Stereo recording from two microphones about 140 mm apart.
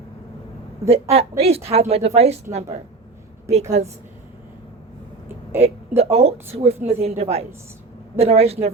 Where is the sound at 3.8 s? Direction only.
50° right (ahead or behind).